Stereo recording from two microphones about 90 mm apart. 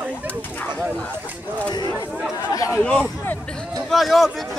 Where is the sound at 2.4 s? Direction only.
40° left (ahead or behind).